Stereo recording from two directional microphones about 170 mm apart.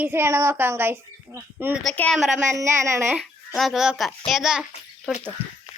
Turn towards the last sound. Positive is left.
turn(degrees=-5)  # may be behind; listen again after turning